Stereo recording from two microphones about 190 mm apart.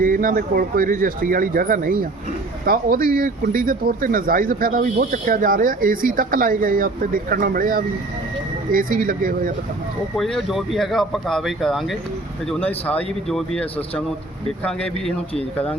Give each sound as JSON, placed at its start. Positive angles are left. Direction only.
{"t": 0.0, "sound": "speech", "side_deg": -45}
{"t": 10.2, "sound": "speech", "side_deg": 0}